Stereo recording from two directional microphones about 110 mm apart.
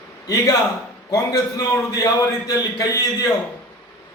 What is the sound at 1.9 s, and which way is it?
A man's voice, 35° left (ahead or behind).